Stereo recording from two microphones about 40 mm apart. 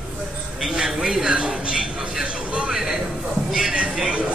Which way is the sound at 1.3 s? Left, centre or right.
Right.